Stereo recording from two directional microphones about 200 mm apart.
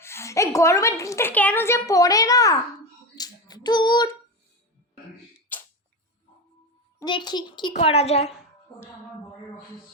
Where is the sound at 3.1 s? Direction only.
20° left (ahead or behind).